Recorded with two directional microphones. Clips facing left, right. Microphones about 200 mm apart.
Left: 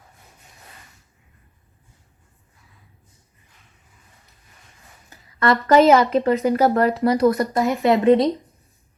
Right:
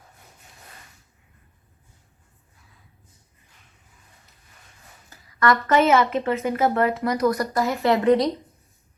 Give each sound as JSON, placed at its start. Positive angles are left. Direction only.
{"t": 5.0, "sound": "a woman's voice", "side_deg": 30}
{"t": 7.3, "sound": "speech", "side_deg": 20}